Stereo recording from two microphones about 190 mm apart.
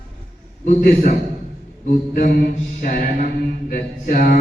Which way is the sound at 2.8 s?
45° left (ahead or behind).